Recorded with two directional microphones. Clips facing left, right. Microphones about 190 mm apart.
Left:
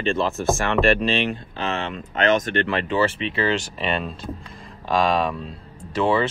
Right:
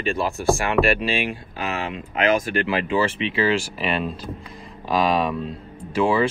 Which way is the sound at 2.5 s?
5° right (ahead or behind).